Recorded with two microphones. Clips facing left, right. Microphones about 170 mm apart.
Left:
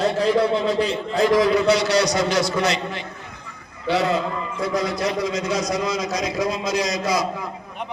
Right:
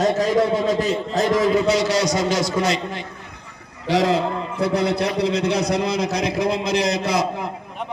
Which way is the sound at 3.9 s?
85° right.